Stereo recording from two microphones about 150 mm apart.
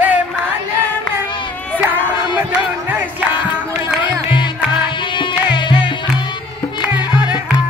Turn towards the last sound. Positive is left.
turn(degrees=30)  # may be behind; listen again after turning